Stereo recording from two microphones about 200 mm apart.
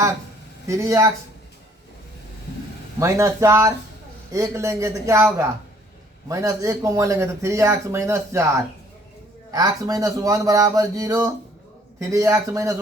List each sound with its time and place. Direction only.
0.7 s speech: 15° right (ahead or behind)
3.0 s speech: 15° right (ahead or behind)